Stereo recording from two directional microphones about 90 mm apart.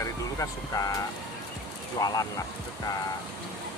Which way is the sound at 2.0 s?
45° left (ahead or behind).